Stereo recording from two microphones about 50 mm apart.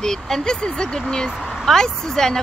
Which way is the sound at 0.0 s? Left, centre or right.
Centre.